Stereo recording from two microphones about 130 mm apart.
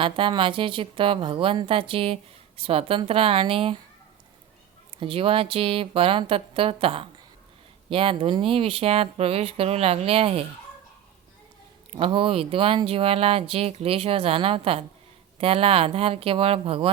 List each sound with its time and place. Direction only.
0.0 s speech: 40° right (ahead or behind)
4.9 s speech: 45° right (ahead or behind)
11.9 s speech: 45° right (ahead or behind)